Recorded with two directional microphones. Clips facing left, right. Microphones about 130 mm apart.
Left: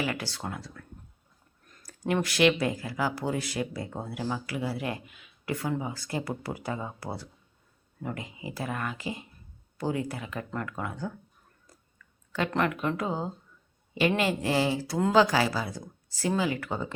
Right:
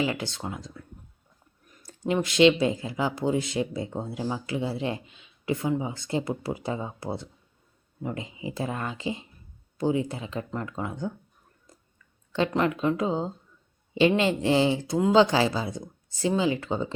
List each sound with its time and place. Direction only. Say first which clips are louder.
0.0 s speech: right 3 dB; 20° right (ahead or behind)
1.8 s clicking: right 2 dB; 25° right (ahead or behind)
2.1 s speech: right 4 dB; 20° right (ahead or behind)
11.6 s a sound: right 2 dB; 25° right (ahead or behind)
12.5 s speech: right 2 dB; 20° right (ahead or behind)